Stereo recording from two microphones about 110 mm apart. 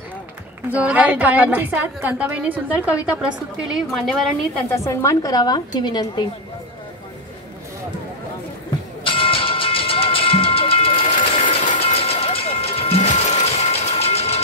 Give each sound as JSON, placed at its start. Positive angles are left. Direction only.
{"t": 0.7, "sound": "a woman's voice", "side_deg": -15}
{"t": 4.6, "sound": "a woman's voice", "side_deg": 25}
{"t": 9.0, "sound": "music", "side_deg": 55}